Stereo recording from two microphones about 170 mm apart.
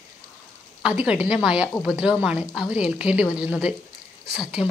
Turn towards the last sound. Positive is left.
turn(degrees=-5)  # may be behind; listen again after turning